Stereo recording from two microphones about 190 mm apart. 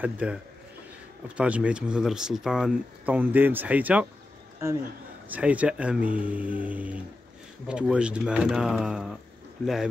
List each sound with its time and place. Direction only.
0.0 s speech: 5° right (ahead or behind)
5.3 s speech: 5° right (ahead or behind)